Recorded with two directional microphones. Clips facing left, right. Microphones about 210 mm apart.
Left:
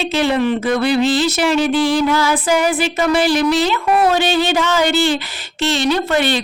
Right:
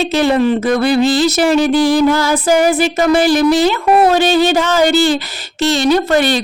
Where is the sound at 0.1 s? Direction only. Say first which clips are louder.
Right 2 dB; 45° right (ahead or behind).